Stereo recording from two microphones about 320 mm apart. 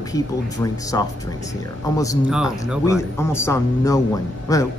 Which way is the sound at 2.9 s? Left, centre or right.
Centre.